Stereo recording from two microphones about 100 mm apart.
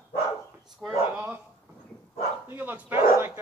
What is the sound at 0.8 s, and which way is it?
Speech, 20° right (ahead or behind).